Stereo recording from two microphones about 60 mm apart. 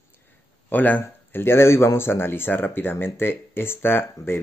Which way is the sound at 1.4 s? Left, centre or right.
Left.